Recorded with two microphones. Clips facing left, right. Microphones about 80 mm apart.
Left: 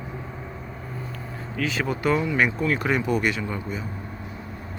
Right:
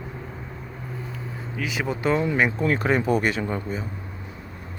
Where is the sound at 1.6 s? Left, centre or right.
Centre; by 3.8 s right.